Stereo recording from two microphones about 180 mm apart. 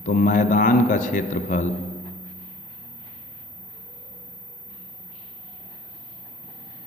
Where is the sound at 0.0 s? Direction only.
50° left (ahead or behind).